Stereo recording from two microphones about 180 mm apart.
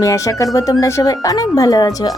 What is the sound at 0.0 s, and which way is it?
Speech, 20° left (ahead or behind).